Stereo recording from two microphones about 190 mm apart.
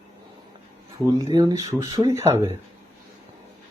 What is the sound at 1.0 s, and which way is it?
Speech, 20° right (ahead or behind).